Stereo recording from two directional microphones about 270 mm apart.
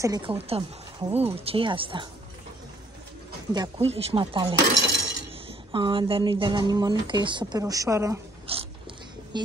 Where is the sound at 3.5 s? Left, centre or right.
Centre.